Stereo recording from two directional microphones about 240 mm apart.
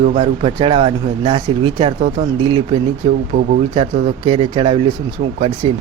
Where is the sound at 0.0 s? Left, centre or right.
Right.